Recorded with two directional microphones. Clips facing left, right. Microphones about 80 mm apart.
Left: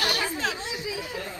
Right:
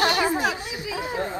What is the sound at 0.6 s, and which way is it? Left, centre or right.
Speech, left.